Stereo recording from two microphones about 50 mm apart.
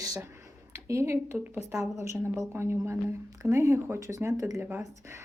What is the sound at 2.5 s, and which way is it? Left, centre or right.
Speech, right.